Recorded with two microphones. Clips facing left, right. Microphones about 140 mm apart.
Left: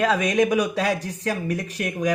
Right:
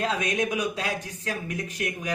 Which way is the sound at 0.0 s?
70° left (ahead or behind).